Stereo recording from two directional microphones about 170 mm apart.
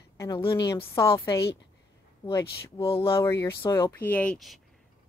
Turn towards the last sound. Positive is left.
turn(degrees=0)  # may be behind; listen again after turning